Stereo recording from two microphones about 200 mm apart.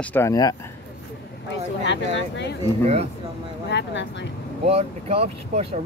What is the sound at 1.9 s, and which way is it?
Speech, 60° left (ahead or behind).